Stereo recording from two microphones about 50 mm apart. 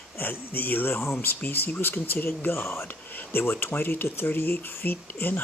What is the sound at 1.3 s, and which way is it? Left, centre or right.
Speech, left.